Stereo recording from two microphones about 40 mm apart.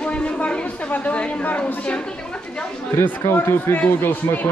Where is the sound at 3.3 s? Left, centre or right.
Left.